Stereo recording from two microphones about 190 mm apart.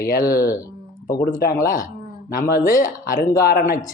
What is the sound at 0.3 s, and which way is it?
Speech, 15° left (ahead or behind).